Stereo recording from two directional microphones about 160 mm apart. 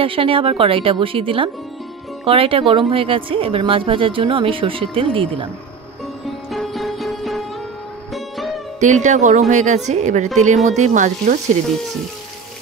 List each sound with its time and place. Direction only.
0.0 s speech: 35° right (ahead or behind)
6.5 s music: centre (ahead or behind)
8.7 s a woman's voice: 50° right (ahead or behind)